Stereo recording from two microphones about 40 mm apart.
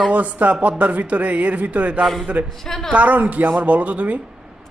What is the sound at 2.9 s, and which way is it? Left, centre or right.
A man's voice, right.